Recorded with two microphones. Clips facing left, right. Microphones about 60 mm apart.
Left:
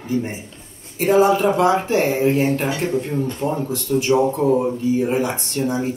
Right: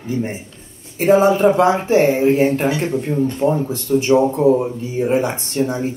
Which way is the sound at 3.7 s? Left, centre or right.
Right.